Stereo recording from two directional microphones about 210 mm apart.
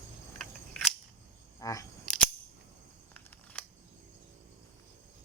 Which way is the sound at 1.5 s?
15° left (ahead or behind).